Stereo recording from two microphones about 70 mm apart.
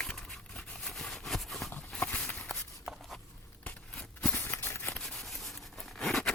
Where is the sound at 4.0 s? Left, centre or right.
Left.